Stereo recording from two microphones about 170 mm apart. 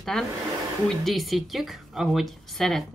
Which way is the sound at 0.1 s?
Centre (ahead or behind).